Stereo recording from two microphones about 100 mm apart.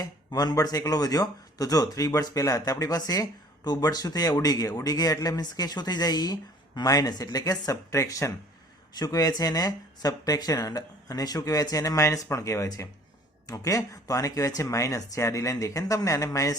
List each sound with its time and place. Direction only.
0.0 s speech: 40° left (ahead or behind)
8.9 s speech: 40° left (ahead or behind)